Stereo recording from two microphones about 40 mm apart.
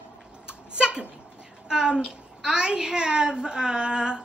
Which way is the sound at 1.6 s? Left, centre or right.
Centre.